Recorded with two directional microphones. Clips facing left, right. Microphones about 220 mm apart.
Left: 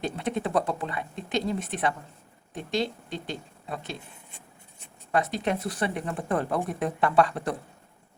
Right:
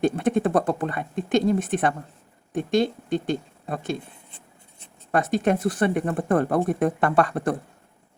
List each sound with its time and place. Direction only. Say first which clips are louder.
0.0 s speech: right 8 dB; 50° right (ahead or behind)
5.1 s speech: right 5 dB; 50° right (ahead or behind)